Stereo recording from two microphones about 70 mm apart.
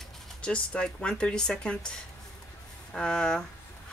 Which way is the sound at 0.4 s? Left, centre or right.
Centre.